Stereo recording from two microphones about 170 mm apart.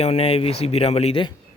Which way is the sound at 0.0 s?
35° left (ahead or behind).